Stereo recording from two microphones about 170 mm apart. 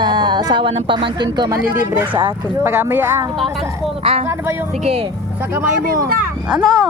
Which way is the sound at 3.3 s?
Centre (ahead or behind).